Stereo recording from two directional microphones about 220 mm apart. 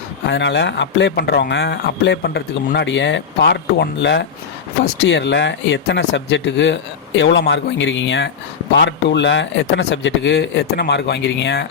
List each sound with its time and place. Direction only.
0.3 s speech: 55° left (ahead or behind)